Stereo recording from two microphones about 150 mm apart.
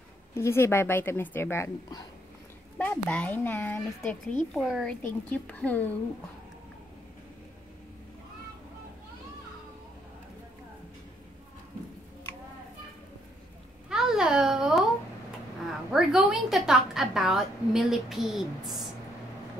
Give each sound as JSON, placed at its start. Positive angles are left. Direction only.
{"t": 0.3, "sound": "a child's voice", "side_deg": 15}
{"t": 2.8, "sound": "a child's voice", "side_deg": 10}
{"t": 5.0, "sound": "a child's voice", "side_deg": 10}
{"t": 13.8, "sound": "babbling", "side_deg": -5}
{"t": 15.6, "sound": "a woman's voice", "side_deg": -5}